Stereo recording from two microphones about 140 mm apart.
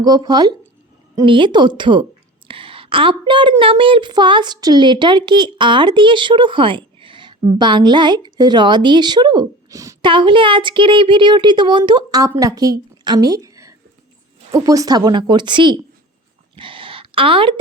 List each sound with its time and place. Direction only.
0.0 s a woman's voice: 30° right (ahead or behind)
10.0 s a woman's voice: 35° right (ahead or behind)
16.6 s a sound: 35° right (ahead or behind)